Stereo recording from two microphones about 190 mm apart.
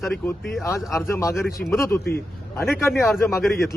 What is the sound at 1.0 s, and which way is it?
Speech, 15° left (ahead or behind).